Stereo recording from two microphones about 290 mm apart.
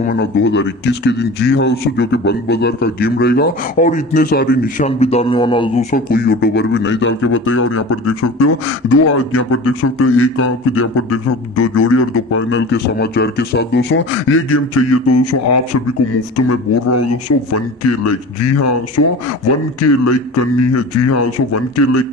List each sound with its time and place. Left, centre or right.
0.0 s a man's voice: left